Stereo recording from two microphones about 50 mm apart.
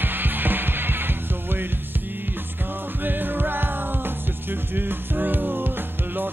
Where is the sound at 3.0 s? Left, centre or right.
Right.